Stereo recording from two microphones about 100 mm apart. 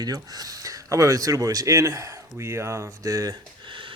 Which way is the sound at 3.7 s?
55° right (ahead or behind).